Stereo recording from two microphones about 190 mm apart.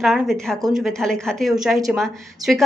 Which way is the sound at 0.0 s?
Centre (ahead or behind).